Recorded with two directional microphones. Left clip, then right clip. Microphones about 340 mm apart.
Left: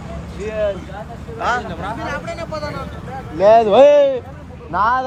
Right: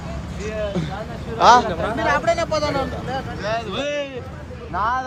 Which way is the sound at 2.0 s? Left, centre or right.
Right.